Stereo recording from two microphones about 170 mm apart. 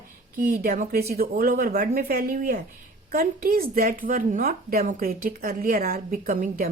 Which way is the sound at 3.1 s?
60° right (ahead or behind).